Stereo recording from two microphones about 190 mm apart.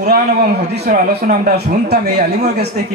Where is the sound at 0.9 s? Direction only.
45° right (ahead or behind).